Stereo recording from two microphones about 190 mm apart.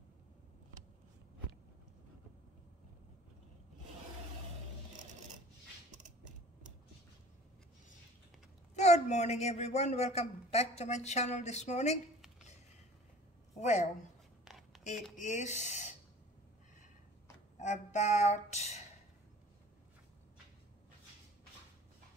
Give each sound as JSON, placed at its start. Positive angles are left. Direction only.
{"t": 6.0, "sound": "creak", "side_deg": -40}
{"t": 8.7, "sound": "a woman's voice", "side_deg": 35}
{"t": 13.6, "sound": "a woman's voice", "side_deg": 35}
{"t": 14.4, "sound": "a sound", "side_deg": 0}
{"t": 15.1, "sound": "a woman's voice", "side_deg": 40}
{"t": 17.6, "sound": "a woman's voice", "side_deg": 40}